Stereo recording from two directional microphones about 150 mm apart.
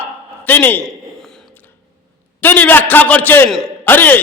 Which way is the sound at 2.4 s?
10° left (ahead or behind).